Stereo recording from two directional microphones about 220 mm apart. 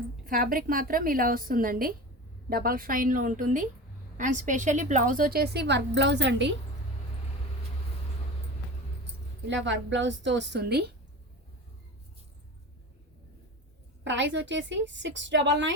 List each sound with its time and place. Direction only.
0.3 s a woman's voice: 40° right (ahead or behind)
9.5 s a woman's voice: 55° right (ahead or behind)
14.0 s a woman's voice: 55° right (ahead or behind)